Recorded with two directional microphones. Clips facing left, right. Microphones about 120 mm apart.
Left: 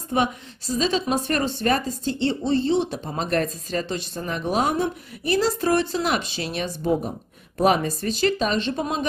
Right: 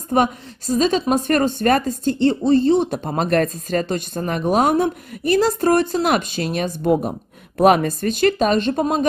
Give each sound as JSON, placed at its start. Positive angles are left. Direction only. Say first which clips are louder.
{"t": 0.1, "sound": "a woman's voice", "louder": "right 5 dB", "side_deg": -50}
{"t": 6.9, "sound": "a woman's voice", "louder": "right 5 dB", "side_deg": -70}